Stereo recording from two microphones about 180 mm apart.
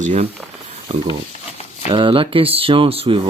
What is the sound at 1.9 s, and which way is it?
Speech, 30° right (ahead or behind).